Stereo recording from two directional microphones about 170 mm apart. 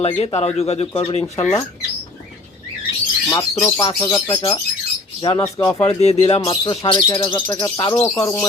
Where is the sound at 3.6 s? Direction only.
30° left (ahead or behind).